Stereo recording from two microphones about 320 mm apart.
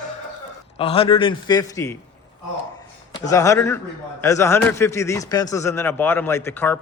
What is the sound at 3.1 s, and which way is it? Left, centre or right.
A man's voice, centre.